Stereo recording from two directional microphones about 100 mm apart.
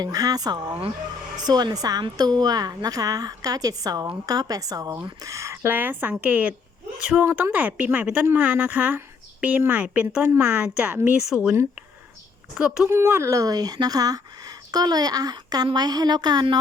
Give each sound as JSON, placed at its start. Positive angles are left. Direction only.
{"t": 0.0, "sound": "a woman's voice", "side_deg": -40}
{"t": 10.2, "sound": "speech", "side_deg": -25}
{"t": 12.5, "sound": "a woman's voice", "side_deg": -5}
{"t": 12.9, "sound": "a woman's voice", "side_deg": -25}